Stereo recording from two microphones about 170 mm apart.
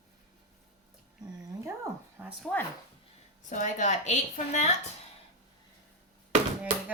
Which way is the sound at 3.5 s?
45° left (ahead or behind).